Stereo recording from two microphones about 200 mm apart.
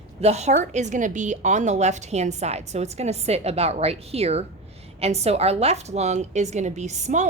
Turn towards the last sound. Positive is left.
turn(degrees=-35)  # may be behind; listen again after turning